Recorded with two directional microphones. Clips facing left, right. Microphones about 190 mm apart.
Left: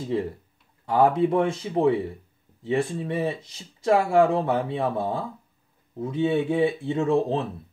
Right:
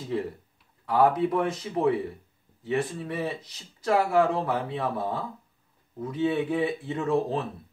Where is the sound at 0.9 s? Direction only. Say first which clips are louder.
Left 3 dB; 30° left (ahead or behind).